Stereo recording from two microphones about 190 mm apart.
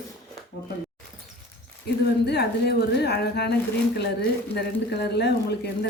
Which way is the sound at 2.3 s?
60° left (ahead or behind).